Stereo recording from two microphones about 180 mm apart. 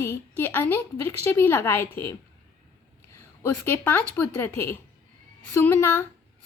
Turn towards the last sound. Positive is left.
turn(degrees=10)  # may be behind; listen again after turning